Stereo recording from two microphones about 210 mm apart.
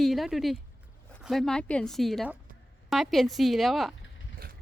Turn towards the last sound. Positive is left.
turn(degrees=0)  # may be behind; listen again after turning